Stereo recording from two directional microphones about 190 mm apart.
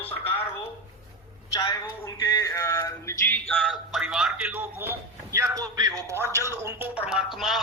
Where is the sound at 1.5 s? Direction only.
15° left (ahead or behind).